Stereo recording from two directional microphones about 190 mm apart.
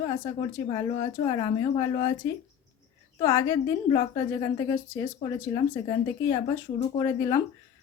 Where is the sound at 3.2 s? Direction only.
15° left (ahead or behind).